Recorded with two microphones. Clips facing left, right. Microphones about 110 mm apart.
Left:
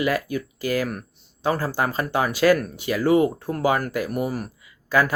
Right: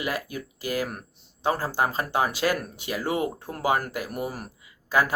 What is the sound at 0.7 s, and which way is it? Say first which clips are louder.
Speech: left 4 dB; 20° right (ahead or behind).